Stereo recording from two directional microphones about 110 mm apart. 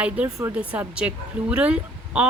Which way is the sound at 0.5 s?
15° right (ahead or behind).